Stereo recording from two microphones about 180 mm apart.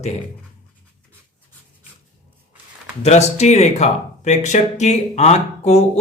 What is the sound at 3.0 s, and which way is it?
Speech, 40° left (ahead or behind).